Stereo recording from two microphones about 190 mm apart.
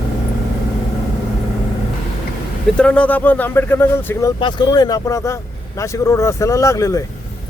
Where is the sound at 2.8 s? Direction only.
5° left (ahead or behind).